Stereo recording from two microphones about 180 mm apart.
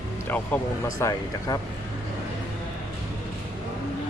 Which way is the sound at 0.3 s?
10° left (ahead or behind).